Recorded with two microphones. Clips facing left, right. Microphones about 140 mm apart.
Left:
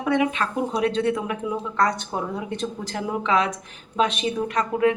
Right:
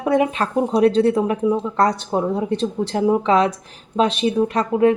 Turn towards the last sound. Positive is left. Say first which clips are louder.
# right 5 dB
turn(degrees=-30)  # may be behind; listen again after turning